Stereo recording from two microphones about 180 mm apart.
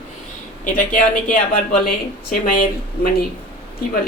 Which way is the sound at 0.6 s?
50° left (ahead or behind).